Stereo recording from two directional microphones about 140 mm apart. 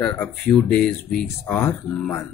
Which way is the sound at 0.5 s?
10° left (ahead or behind).